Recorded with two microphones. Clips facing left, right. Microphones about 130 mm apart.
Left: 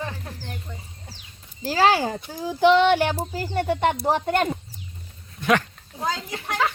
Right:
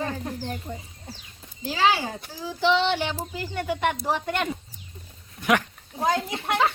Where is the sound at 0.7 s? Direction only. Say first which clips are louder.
Right 5 dB; 45° right (ahead or behind).